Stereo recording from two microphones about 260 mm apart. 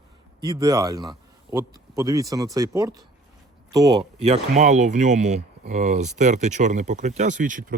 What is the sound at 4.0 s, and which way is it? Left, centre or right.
Speech, right.